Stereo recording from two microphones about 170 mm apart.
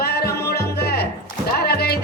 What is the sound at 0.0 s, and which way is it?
Music, 65° left (ahead or behind).